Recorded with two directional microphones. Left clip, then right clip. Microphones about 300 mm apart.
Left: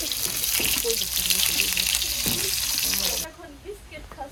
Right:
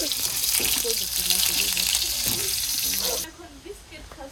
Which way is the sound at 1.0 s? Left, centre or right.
Centre.